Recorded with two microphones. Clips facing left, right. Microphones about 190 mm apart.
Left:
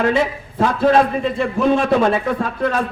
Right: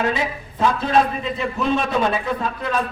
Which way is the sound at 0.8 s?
55° left (ahead or behind).